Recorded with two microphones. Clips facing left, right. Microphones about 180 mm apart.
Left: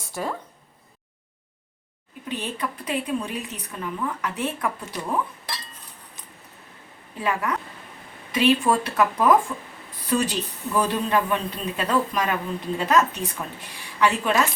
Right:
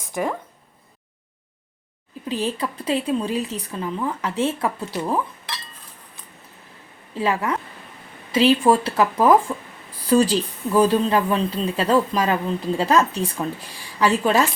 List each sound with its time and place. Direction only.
0.2 s speech: 10° right (ahead or behind)
2.3 s speech: 30° right (ahead or behind)
7.2 s speech: 25° right (ahead or behind)